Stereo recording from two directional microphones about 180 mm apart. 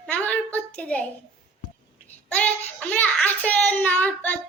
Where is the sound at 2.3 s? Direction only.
10° left (ahead or behind).